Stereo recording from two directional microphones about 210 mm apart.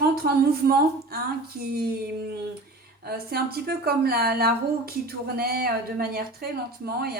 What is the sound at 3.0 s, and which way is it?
A woman's voice, 45° right (ahead or behind).